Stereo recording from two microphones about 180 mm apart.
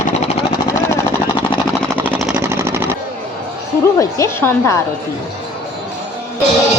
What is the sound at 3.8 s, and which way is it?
Speech, 15° left (ahead or behind).